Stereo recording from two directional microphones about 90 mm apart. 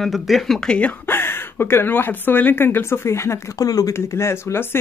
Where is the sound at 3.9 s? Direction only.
30° left (ahead or behind).